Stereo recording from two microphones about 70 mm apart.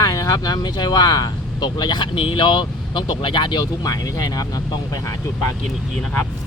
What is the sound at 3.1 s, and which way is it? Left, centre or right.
Speech, left.